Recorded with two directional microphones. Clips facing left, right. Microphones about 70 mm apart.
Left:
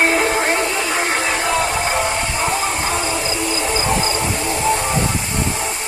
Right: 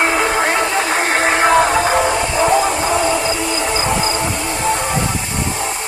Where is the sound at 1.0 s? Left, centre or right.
Right.